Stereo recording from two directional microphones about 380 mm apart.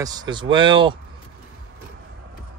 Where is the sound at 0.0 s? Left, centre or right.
Centre.